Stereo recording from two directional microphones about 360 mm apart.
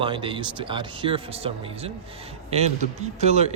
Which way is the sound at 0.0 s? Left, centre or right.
Centre.